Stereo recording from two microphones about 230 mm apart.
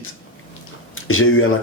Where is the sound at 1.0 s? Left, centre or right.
Left.